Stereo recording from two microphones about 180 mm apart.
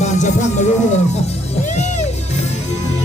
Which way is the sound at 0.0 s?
40° left (ahead or behind).